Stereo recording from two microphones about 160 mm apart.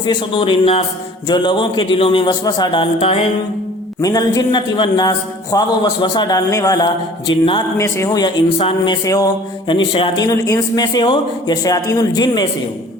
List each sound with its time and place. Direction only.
0.0 s speech: 30° left (ahead or behind)
3.0 s speech: 35° left (ahead or behind)
4.0 s speech: 25° left (ahead or behind)
7.8 s speech: 20° left (ahead or behind)